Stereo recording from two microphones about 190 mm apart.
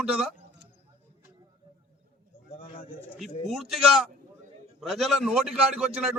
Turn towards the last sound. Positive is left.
turn(degrees=-5)  # may be behind; listen again after turning